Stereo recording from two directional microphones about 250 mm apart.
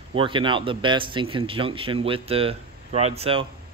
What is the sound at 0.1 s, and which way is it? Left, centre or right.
Speech, centre.